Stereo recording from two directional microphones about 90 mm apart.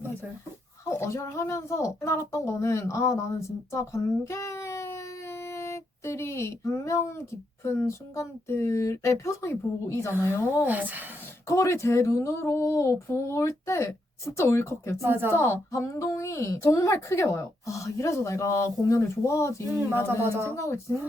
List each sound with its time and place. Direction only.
0.9 s speech: 30° left (ahead or behind)
10.7 s speech: 20° right (ahead or behind)
11.4 s speech: 35° left (ahead or behind)
15.0 s speech: 25° right (ahead or behind)
15.3 s speech: 30° left (ahead or behind)
19.7 s speech: 25° right (ahead or behind)
20.6 s speech: 35° left (ahead or behind)